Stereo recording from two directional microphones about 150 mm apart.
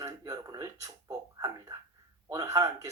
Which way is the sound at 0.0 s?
25° right (ahead or behind).